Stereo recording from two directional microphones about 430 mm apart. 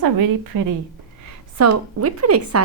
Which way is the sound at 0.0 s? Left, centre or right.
Right.